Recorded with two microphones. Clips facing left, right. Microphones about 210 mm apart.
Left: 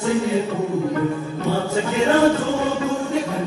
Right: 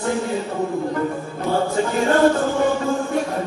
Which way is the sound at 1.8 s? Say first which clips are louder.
Left 1 dB; 50° right (ahead or behind).